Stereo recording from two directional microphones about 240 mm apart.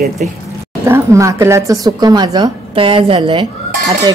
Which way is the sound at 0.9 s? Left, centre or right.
Centre.